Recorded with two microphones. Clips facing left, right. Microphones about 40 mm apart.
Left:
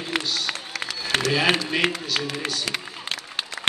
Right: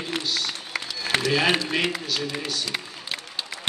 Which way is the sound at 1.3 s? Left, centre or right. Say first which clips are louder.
Left 1 dB; centre.